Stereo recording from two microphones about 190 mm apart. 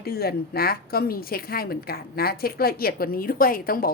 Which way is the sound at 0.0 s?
55° left (ahead or behind).